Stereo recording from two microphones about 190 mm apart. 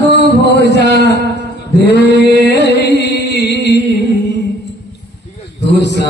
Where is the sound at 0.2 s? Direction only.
65° left (ahead or behind).